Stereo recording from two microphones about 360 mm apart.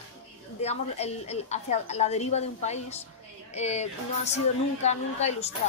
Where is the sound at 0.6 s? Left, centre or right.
Centre.